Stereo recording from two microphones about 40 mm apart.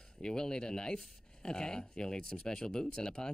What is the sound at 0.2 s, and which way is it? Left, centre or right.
Speech, centre.